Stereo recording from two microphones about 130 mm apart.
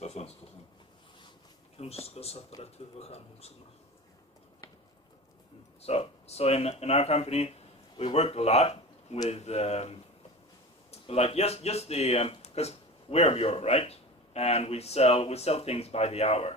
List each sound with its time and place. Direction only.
0.0 s a sound: 55° left (ahead or behind)
1.8 s speech: 50° left (ahead or behind)
5.8 s speech: 50° left (ahead or behind)